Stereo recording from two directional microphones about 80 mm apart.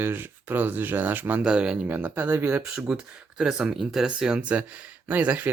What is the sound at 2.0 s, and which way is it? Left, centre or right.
Speech, right.